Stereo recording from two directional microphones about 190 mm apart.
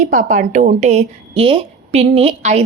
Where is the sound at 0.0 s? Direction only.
40° right (ahead or behind).